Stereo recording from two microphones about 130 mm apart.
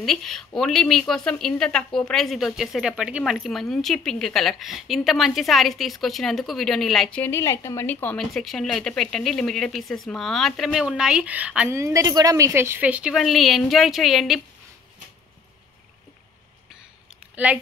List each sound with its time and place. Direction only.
0.0 s a woman's voice: centre (ahead or behind)
8.2 s a woman's voice: centre (ahead or behind)
11.7 s speech: 25° right (ahead or behind)
13.1 s a woman's voice: centre (ahead or behind)